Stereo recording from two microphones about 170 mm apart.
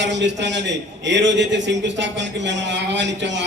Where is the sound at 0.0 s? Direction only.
90° right.